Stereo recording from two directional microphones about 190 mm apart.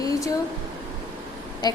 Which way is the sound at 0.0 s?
20° left (ahead or behind).